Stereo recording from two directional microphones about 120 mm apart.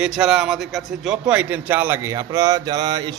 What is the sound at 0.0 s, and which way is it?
A man's voice, 5° right (ahead or behind).